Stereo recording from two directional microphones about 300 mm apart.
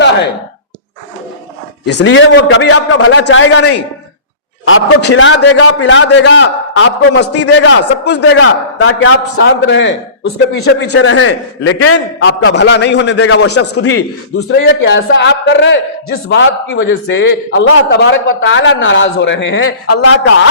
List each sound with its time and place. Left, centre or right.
1.8 s a man's voice: left
13.7 s a man's voice: left